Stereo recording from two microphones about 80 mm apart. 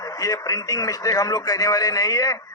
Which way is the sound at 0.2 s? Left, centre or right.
Left.